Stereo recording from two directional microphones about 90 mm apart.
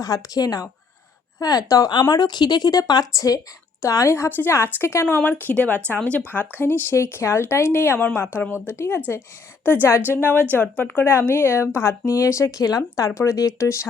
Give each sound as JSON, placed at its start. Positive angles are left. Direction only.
{"t": 0.0, "sound": "speech", "side_deg": 45}
{"t": 1.9, "sound": "a woman's voice", "side_deg": 55}
{"t": 6.6, "sound": "a woman's voice", "side_deg": 25}